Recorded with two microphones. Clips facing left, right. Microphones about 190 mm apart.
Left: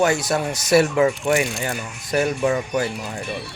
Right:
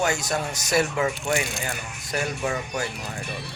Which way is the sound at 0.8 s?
30° left (ahead or behind).